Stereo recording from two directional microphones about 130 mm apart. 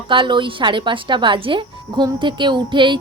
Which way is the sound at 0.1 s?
40° right (ahead or behind).